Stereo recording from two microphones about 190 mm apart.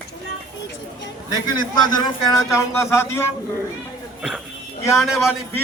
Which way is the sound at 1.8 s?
20° left (ahead or behind).